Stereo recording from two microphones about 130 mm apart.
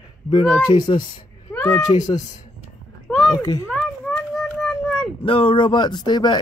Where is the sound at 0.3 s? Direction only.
35° left (ahead or behind).